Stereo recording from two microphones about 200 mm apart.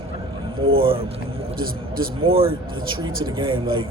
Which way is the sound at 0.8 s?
25° right (ahead or behind).